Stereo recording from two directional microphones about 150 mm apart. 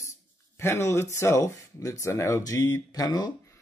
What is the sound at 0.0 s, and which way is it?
Speech, 20° left (ahead or behind).